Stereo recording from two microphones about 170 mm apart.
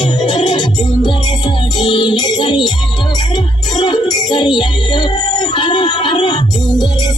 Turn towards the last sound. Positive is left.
turn(degrees=25)  # may be behind; listen again after turning